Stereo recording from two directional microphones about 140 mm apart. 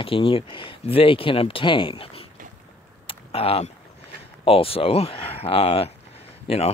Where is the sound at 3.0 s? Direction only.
45° left (ahead or behind).